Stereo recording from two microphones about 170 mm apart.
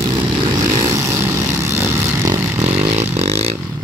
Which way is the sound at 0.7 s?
20° right (ahead or behind).